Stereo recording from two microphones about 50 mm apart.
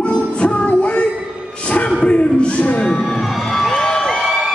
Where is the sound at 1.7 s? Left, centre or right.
Left.